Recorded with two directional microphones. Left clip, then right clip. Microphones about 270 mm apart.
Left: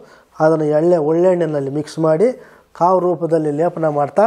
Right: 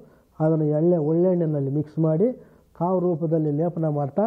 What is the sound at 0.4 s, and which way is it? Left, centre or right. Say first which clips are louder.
Speech: left 9 dB; centre.